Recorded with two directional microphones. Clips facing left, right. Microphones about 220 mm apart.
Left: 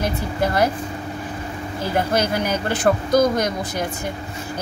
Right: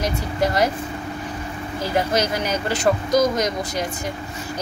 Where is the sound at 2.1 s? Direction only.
55° left (ahead or behind).